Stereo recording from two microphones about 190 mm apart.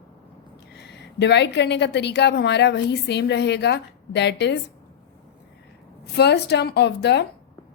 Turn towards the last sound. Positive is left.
turn(degrees=65)  # may be behind; listen again after turning